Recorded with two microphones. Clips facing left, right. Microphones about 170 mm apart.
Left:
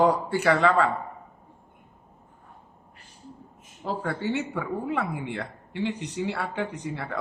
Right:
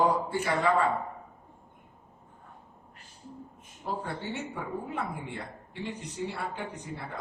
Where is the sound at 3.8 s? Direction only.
80° left.